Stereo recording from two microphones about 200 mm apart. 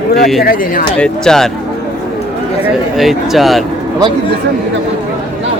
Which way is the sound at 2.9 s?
Centre (ahead or behind).